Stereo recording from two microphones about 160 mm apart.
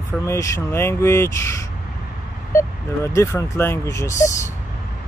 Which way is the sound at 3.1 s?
15° left (ahead or behind).